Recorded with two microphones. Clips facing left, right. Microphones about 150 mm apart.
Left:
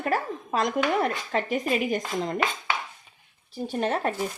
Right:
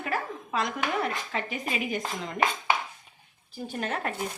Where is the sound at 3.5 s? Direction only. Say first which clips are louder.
Left 6 dB; 30° left (ahead or behind).